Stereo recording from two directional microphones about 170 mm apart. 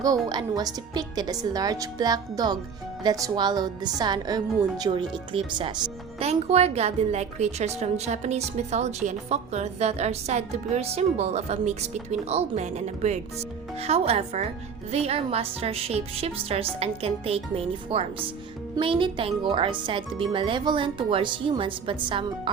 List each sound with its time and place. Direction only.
0.3 s a woman's voice: 25° right (ahead or behind)